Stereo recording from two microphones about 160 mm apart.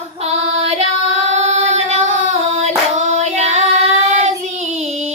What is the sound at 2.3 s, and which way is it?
Singing, 45° right (ahead or behind).